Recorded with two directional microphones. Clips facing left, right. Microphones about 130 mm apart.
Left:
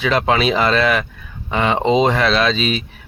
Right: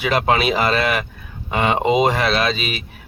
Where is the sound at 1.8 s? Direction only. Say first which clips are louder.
Left 2 dB; 10° right (ahead or behind).